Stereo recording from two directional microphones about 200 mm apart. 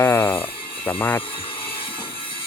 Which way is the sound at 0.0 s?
10° left (ahead or behind).